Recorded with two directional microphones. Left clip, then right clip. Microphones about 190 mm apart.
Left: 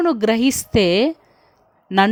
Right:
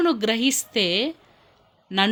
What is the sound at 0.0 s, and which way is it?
A woman's voice, 45° left (ahead or behind).